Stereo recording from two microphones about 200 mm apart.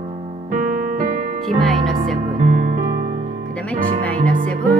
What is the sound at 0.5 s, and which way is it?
Music, 40° right (ahead or behind).